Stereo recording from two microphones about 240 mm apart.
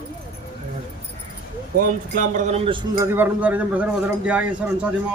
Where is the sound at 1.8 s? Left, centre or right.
Right; by 3.0 s centre.